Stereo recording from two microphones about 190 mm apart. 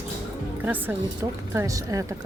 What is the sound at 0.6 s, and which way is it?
Speech, 10° right (ahead or behind).